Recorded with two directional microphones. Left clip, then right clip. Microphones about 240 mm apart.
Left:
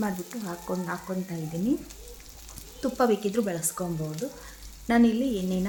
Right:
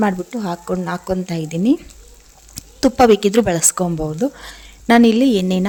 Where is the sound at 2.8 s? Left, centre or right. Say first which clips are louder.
Right 13 dB; right.